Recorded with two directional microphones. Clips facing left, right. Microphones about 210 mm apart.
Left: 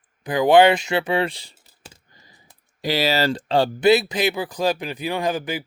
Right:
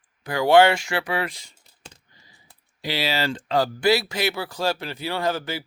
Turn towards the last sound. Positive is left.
turn(degrees=15)  # may be behind; listen again after turning